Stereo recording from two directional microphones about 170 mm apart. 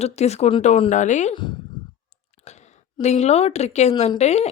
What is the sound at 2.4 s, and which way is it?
A woman's voice, 40° left (ahead or behind).